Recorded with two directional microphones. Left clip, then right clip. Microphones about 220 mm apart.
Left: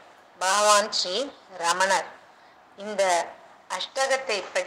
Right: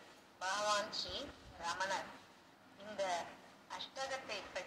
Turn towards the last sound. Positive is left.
turn(degrees=50)  # may be behind; listen again after turning